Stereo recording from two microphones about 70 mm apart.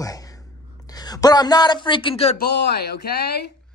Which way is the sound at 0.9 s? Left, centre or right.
Left.